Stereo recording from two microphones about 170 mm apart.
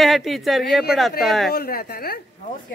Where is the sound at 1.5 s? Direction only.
65° left (ahead or behind).